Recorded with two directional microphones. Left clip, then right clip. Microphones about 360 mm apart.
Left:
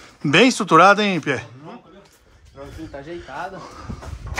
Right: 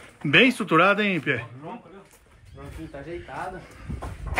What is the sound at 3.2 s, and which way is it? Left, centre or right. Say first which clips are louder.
Speech: left 3 dB; centre.